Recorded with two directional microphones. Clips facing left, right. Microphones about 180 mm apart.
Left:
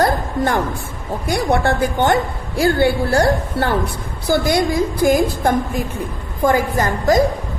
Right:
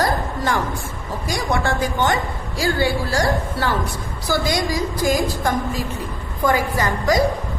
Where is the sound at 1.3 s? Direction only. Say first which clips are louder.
Left 5 dB; 60° left (ahead or behind).